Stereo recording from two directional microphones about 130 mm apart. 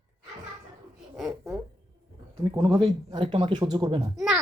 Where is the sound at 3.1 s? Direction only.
40° right (ahead or behind).